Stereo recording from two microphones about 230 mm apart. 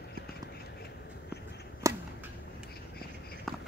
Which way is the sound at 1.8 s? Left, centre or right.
Centre.